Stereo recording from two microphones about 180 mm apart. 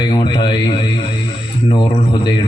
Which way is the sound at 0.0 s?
25° left (ahead or behind).